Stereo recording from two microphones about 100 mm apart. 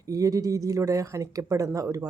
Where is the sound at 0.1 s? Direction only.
35° right (ahead or behind).